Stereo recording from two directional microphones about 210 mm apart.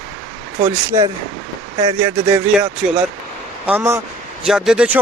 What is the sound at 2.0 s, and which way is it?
Speech, 10° right (ahead or behind).